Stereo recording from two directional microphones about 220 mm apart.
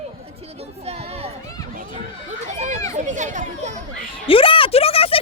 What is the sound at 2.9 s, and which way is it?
Children playing, 35° right (ahead or behind).